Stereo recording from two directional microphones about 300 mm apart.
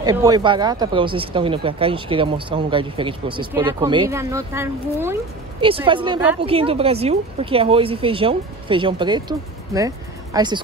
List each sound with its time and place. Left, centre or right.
0.0 s speech: centre
5.9 s speech: centre
6.4 s speech: centre